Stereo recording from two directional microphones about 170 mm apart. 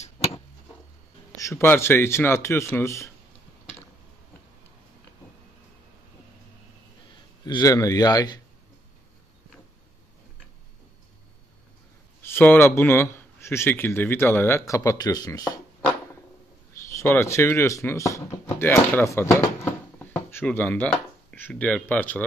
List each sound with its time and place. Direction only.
1.3 s a man's voice: 15° left (ahead or behind)
7.4 s speech: 20° left (ahead or behind)
12.2 s a sound: 15° left (ahead or behind)
12.5 s a man's voice: 15° left (ahead or behind)
16.9 s a man's voice: 15° left (ahead or behind)
19.3 s a sound: 15° left (ahead or behind)